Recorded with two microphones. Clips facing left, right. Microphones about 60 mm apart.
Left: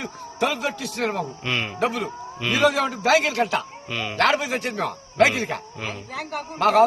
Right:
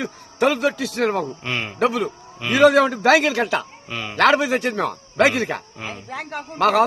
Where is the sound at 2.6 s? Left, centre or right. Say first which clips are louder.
Right 7 dB; right.